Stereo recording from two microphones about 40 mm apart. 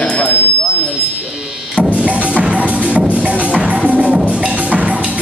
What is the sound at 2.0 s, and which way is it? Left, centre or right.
Music, right.